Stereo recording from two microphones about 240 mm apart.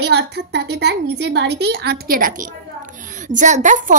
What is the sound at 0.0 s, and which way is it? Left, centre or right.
A woman's voice, right.